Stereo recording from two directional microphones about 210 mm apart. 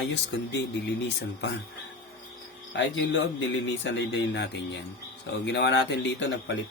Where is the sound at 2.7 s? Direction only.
55° left (ahead or behind).